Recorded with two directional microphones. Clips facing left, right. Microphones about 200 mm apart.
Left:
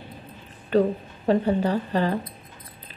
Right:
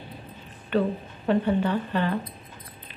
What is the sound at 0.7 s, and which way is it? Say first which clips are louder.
A woman's voice: left 4 dB; 40° left (ahead or behind).